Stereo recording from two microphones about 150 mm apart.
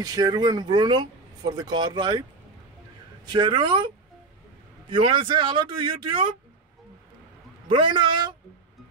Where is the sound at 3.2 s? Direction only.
30° right (ahead or behind).